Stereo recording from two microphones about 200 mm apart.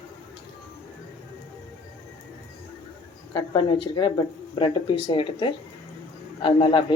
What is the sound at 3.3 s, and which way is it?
Speech, 25° left (ahead or behind).